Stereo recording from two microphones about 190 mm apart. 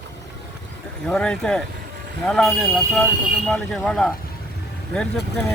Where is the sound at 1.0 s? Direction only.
5° left (ahead or behind).